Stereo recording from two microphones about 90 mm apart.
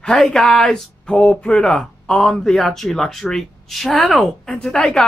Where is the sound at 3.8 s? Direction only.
Centre (ahead or behind).